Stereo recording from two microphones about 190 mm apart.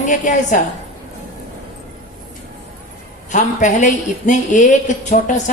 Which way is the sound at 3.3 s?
40° left (ahead or behind).